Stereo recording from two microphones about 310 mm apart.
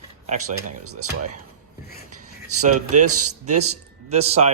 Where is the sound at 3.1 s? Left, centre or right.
Right.